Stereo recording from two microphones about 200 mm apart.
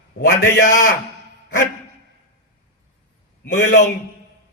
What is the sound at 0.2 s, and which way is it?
Speech, 40° left (ahead or behind).